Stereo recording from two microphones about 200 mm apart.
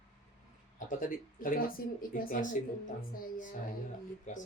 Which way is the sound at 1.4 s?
45° left (ahead or behind).